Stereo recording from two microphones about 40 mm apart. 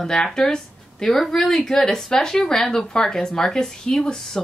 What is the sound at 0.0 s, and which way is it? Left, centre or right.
Speech, centre.